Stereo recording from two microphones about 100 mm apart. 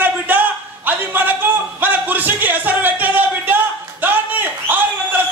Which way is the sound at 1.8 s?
15° right (ahead or behind).